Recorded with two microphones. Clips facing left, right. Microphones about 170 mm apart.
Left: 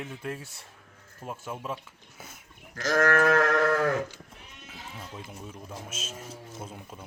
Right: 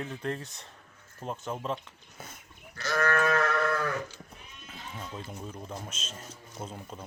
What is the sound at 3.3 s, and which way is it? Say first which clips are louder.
Livestock: left 4 dB; 90° left.